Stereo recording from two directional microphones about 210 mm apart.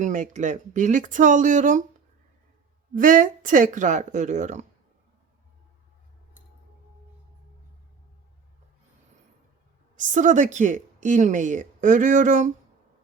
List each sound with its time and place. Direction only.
0.0 s a woman's voice: 35° right (ahead or behind)
2.9 s a woman's voice: 40° right (ahead or behind)
9.9 s a woman's voice: 35° right (ahead or behind)